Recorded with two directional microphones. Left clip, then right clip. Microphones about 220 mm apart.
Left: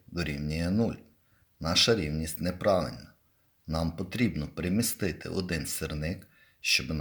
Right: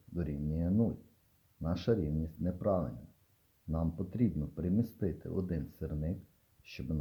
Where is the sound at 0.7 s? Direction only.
20° left (ahead or behind).